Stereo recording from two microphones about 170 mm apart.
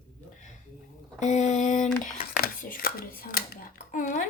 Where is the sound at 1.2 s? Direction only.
45° left (ahead or behind).